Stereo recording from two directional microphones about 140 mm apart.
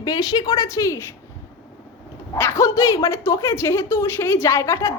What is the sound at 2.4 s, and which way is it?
A woman's voice, 20° left (ahead or behind).